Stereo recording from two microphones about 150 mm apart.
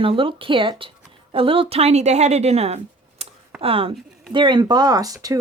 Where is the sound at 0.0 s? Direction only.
35° right (ahead or behind).